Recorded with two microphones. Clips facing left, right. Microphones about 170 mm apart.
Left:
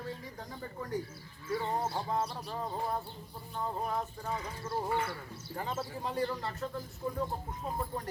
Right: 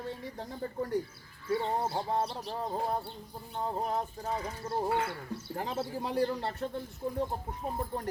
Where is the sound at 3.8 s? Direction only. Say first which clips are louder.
Right 2 dB; 30° right (ahead or behind).